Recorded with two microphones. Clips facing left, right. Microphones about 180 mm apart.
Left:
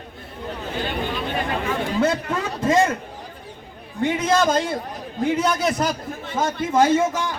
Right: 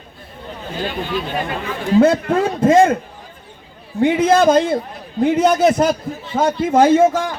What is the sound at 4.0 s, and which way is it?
A man's voice, 55° right (ahead or behind).